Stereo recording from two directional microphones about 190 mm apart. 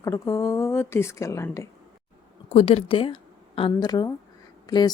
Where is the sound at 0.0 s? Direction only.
15° left (ahead or behind).